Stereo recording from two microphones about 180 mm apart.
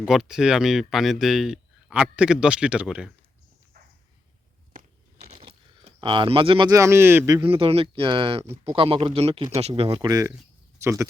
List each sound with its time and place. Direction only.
0.0 s speech: 5° right (ahead or behind)
4.7 s a sound: 40° right (ahead or behind); by 7.4 s 15° right (ahead or behind)
7.4 s speech: 30° right (ahead or behind); by 11.1 s 15° right (ahead or behind)